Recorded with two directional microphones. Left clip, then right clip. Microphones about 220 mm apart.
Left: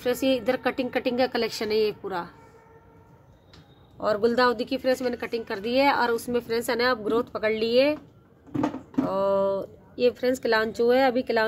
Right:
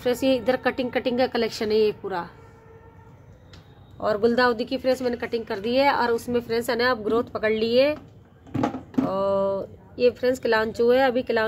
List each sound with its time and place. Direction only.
0.0 s a woman's voice: centre (ahead or behind)
4.0 s a woman's voice: 10° left (ahead or behind)
8.5 s a sound: 15° right (ahead or behind)
9.0 s speech: 10° left (ahead or behind)